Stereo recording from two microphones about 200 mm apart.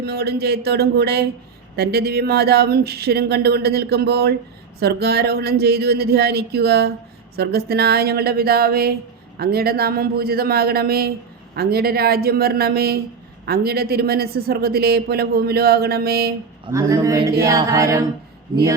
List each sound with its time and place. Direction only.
0.0 s a man's voice: 55° right (ahead or behind)
16.7 s speech: 15° right (ahead or behind)